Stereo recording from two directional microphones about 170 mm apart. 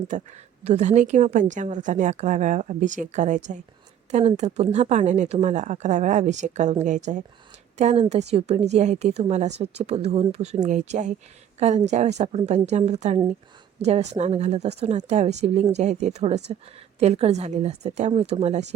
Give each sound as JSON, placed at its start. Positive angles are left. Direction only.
{"t": 0.1, "sound": "a woman's voice", "side_deg": -45}